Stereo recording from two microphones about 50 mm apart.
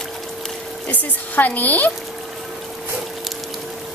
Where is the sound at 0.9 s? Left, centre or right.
Left.